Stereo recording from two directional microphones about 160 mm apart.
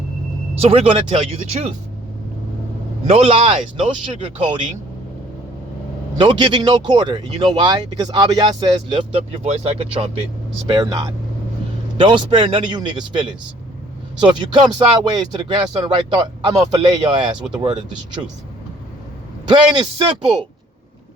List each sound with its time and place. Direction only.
0.6 s speech: 35° right (ahead or behind)
3.1 s speech: 35° right (ahead or behind)
6.1 s speech: 30° right (ahead or behind)
10.7 s speech: 25° right (ahead or behind)
19.5 s speech: 30° right (ahead or behind)